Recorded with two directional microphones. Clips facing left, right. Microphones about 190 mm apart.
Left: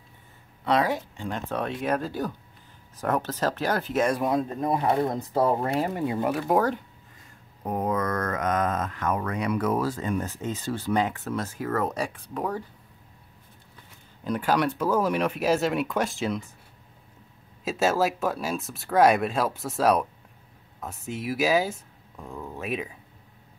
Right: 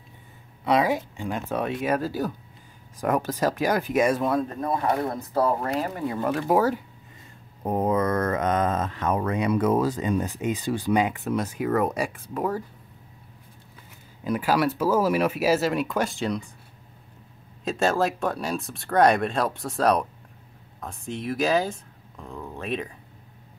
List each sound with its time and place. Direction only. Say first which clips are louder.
0.7 s speech: right 2 dB; 10° right (ahead or behind)
4.2 s speech: even; 15° left (ahead or behind)
6.4 s speech: right 3 dB; 5° right (ahead or behind)
7.6 s speech: right 4 dB; 25° right (ahead or behind); by 12.6 s 5° right (ahead or behind)
14.2 s speech: right 1 dB; 5° right (ahead or behind)
17.6 s speech: even; 5° left (ahead or behind)